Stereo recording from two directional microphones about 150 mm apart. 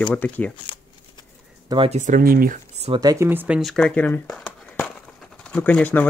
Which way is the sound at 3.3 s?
10° right (ahead or behind).